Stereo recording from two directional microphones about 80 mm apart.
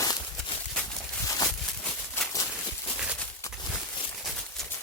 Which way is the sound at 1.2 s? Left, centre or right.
Left.